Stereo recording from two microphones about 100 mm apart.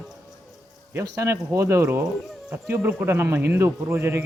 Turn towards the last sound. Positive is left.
turn(degrees=-25)  # may be behind; listen again after turning